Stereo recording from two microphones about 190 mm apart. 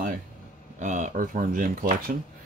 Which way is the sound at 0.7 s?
40° right (ahead or behind).